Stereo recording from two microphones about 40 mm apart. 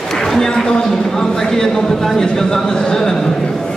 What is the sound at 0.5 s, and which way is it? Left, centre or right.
Speech, centre.